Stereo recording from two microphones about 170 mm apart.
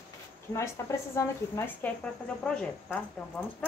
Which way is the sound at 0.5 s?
15° left (ahead or behind).